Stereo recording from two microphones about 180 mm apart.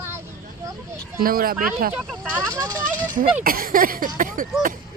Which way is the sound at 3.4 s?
55° right (ahead or behind).